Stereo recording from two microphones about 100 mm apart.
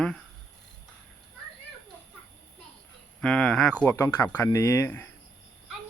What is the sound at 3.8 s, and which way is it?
Speech, 25° left (ahead or behind).